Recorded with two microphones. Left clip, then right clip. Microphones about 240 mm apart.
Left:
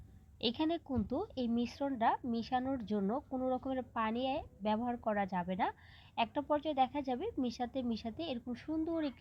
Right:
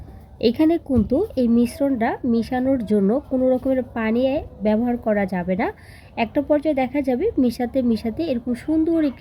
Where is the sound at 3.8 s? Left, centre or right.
Left.